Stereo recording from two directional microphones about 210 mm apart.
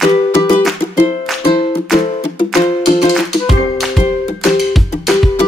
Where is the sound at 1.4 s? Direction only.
25° left (ahead or behind).